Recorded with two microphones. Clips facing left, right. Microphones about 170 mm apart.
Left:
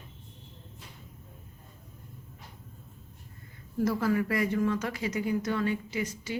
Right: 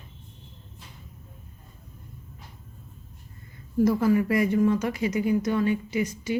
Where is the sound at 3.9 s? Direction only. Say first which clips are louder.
Right 5 dB; 15° right (ahead or behind).